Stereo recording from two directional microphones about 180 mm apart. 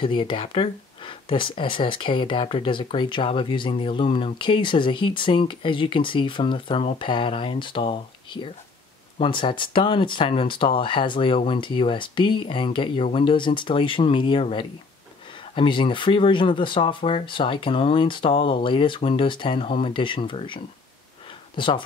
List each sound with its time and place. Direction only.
0.0 s speech: 25° left (ahead or behind)